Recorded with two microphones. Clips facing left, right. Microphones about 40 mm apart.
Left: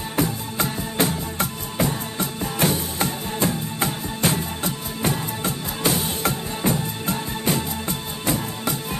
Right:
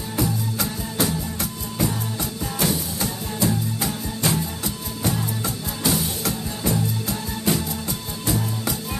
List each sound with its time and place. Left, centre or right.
0.1 s music: left